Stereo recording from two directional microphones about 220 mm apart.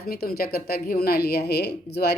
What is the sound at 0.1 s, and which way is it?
A woman's voice, 45° left (ahead or behind).